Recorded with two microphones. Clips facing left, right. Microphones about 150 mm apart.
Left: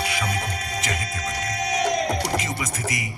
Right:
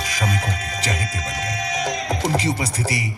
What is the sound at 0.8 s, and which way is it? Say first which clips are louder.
Music: right 2 dB; 35° right (ahead or behind).